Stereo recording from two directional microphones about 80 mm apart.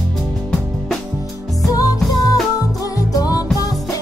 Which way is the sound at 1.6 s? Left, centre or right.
Left.